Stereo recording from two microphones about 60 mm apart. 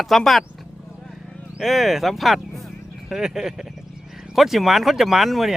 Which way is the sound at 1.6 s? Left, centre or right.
Centre.